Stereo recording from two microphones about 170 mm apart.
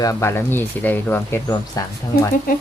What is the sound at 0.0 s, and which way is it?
Speech, 15° left (ahead or behind).